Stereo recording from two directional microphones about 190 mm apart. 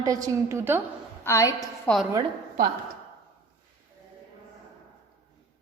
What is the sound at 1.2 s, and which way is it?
Speech, 15° left (ahead or behind).